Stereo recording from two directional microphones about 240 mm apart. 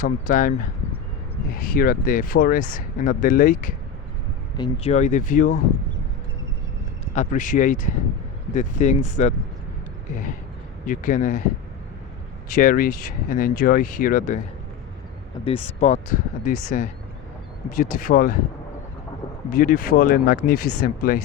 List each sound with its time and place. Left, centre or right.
0.0 s speech: left
1.5 s speech: left
4.5 s speech: left
7.1 s speech: left
10.8 s speech: left
12.5 s speech: left
15.4 s speech: left
19.5 s speech: left